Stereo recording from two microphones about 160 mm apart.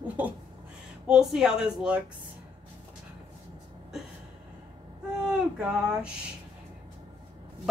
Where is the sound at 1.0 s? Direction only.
5° right (ahead or behind).